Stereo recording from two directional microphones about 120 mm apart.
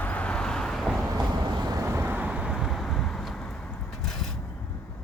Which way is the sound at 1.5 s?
35° right (ahead or behind).